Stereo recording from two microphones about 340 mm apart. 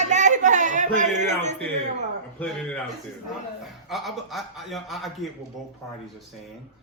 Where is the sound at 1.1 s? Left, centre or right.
Right.